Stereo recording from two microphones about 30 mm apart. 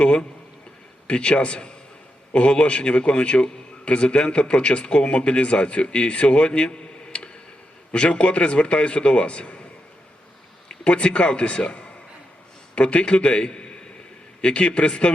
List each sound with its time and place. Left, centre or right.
0.0 s a man's voice: left
10.8 s a man's voice: left